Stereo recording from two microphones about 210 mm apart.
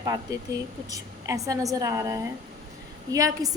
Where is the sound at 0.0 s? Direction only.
20° right (ahead or behind).